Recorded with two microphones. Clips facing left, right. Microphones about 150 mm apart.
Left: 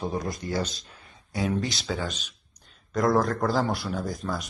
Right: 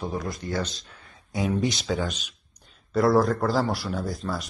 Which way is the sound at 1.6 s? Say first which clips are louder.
Right 4 dB; 20° right (ahead or behind).